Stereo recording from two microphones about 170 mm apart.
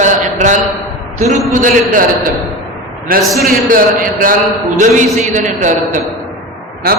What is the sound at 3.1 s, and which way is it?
A man's voice, 60° right (ahead or behind).